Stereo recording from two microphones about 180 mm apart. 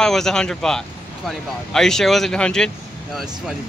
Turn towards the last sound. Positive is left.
turn(degrees=0)  # may be behind; listen again after turning